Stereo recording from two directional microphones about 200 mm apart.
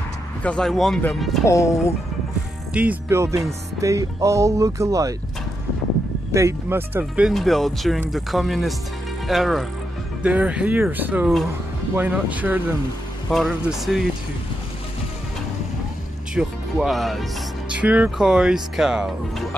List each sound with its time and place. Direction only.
0.4 s speech: 5° left (ahead or behind)
1.4 s speech: 15° left (ahead or behind)
2.7 s speech: 5° right (ahead or behind)
6.3 s speech: 15° right (ahead or behind)
16.3 s speech: centre (ahead or behind)